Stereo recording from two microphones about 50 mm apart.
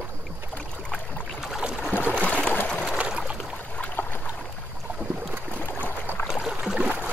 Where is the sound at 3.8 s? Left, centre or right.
Left.